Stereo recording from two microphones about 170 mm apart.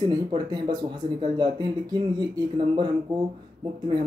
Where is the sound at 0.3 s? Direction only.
25° right (ahead or behind).